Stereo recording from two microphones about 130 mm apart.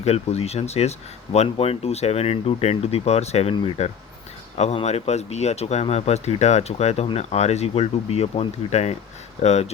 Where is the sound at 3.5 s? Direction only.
40° left (ahead or behind).